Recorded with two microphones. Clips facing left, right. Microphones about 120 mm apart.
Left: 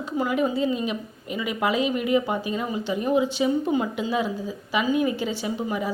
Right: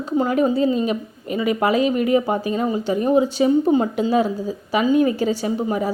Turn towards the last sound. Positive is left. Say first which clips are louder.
# right 5 dB
turn(degrees=-40)  # may be behind; listen again after turning